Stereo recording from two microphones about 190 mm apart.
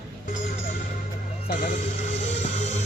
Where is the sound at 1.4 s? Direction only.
45° left (ahead or behind).